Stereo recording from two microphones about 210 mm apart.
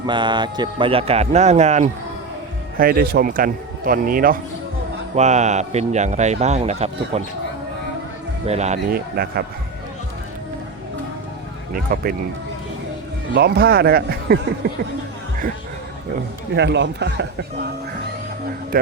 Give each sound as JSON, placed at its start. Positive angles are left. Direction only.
{"t": 0.0, "sound": "a man's voice", "side_deg": -20}
{"t": 2.7, "sound": "speech", "side_deg": -45}
{"t": 8.4, "sound": "speech", "side_deg": -30}
{"t": 8.9, "sound": "speech", "side_deg": -45}
{"t": 11.7, "sound": "speech", "side_deg": -45}
{"t": 13.3, "sound": "speech", "side_deg": -50}
{"t": 16.6, "sound": "speech", "side_deg": -55}
{"t": 18.7, "sound": "a man's voice", "side_deg": -45}